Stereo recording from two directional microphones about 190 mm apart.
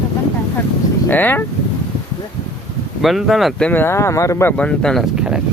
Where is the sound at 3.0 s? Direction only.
Centre (ahead or behind).